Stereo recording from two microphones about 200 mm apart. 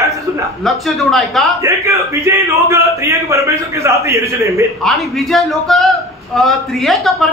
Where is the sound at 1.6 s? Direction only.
15° right (ahead or behind).